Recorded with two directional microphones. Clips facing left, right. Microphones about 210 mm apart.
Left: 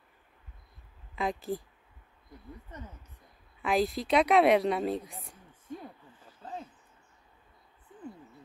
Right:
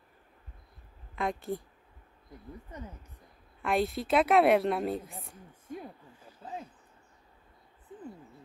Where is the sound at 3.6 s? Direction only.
Centre (ahead or behind).